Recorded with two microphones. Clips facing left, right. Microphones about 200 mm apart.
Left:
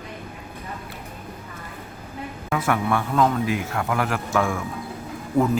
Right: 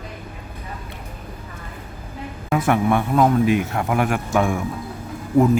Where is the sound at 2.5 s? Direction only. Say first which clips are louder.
Right 4 dB; 20° right (ahead or behind).